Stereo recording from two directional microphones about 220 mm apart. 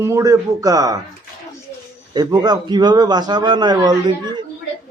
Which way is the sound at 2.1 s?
20° right (ahead or behind).